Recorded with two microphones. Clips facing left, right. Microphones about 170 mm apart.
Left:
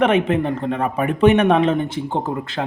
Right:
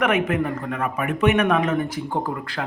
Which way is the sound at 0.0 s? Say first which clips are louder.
Left 4 dB; 30° left (ahead or behind).